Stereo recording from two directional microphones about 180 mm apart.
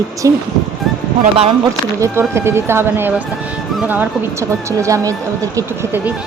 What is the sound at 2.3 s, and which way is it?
A woman's voice, 15° right (ahead or behind).